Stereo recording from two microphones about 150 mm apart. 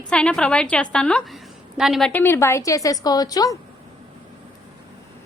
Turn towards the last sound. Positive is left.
turn(degrees=25)  # may be behind; listen again after turning